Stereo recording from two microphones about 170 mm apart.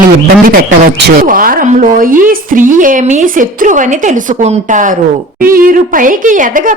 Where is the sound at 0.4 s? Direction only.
60° right (ahead or behind).